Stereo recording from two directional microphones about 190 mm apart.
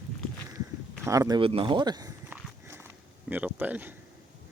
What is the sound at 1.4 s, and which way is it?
Walk, 30° right (ahead or behind).